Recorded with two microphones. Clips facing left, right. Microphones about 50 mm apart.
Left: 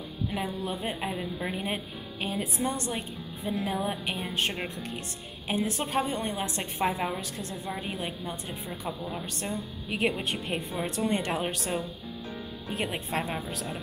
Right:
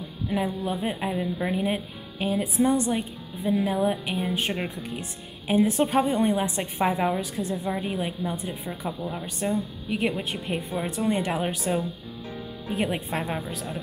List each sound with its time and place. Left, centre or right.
0.3 s a woman's voice: centre
5.8 s speech: right
7.8 s speech: centre
9.2 s speech: centre
9.8 s speech: centre